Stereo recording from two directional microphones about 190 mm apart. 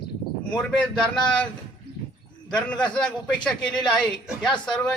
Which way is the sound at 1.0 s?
5° left (ahead or behind).